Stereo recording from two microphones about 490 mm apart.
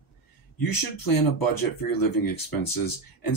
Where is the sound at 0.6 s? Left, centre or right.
Left.